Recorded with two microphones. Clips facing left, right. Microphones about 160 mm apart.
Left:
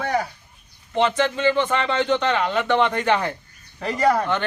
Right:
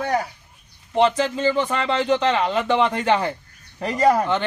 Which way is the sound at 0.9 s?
35° right (ahead or behind).